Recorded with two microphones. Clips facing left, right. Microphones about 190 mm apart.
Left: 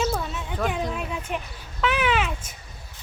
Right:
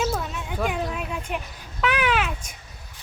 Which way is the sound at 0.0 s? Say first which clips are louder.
Even; centre (ahead or behind).